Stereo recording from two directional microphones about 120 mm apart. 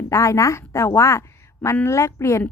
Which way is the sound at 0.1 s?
25° left (ahead or behind).